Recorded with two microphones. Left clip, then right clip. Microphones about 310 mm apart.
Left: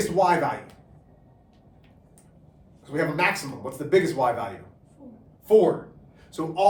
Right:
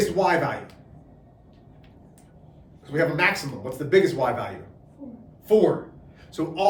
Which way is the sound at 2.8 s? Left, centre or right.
Centre.